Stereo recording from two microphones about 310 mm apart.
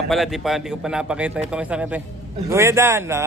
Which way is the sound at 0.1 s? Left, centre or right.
Centre.